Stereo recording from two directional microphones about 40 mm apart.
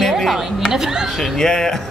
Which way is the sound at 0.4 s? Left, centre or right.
Centre.